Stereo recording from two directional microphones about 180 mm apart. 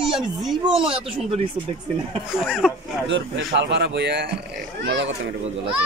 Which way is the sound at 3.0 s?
80° right.